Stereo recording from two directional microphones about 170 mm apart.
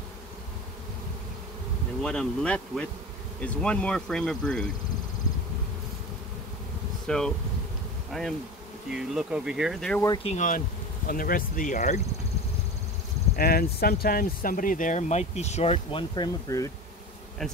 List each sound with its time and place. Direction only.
2.0 s speech: 5° left (ahead or behind)
7.1 s speech: 5° left (ahead or behind)
8.1 s bee: centre (ahead or behind)
8.9 s speech: 5° right (ahead or behind)
10.2 s speech: 45° left (ahead or behind)
11.1 s speech: 55° left (ahead or behind)
13.4 s speech: 65° left (ahead or behind); by 16.7 s 20° left (ahead or behind)
17.4 s speech: centre (ahead or behind)